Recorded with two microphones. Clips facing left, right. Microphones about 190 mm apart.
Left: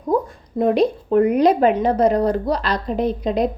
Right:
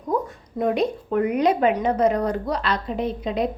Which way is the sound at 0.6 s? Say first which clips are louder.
Left 5 dB; 35° left (ahead or behind).